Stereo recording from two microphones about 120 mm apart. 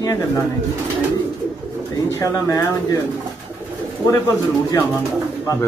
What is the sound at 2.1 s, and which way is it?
Speech, 25° left (ahead or behind).